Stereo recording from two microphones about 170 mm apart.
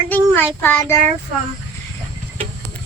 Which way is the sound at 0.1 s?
10° left (ahead or behind).